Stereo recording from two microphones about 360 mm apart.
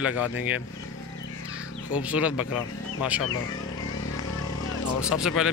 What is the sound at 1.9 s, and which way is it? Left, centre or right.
Speech, centre.